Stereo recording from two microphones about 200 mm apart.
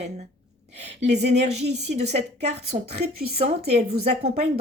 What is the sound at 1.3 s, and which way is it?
A woman's voice, 35° right (ahead or behind).